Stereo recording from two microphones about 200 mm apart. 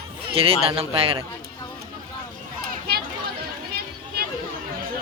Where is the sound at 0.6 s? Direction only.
30° right (ahead or behind).